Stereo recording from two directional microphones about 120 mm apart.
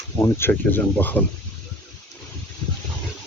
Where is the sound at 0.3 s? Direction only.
15° left (ahead or behind).